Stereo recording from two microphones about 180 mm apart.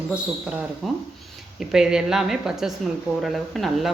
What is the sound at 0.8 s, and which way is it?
A woman's voice, centre (ahead or behind).